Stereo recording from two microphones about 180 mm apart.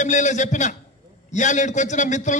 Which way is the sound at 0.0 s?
40° left (ahead or behind).